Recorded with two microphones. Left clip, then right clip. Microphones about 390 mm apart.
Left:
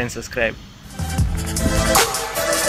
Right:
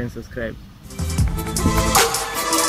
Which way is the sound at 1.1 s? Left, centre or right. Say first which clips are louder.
Right 1 dB; centre.